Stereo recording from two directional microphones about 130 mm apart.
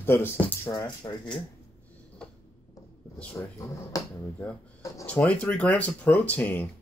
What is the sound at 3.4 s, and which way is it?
Speech, 20° left (ahead or behind).